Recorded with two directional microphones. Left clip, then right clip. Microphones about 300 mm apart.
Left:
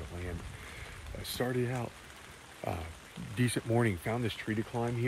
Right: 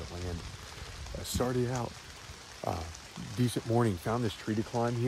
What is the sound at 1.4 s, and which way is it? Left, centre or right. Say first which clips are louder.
Speech: right 2 dB; centre.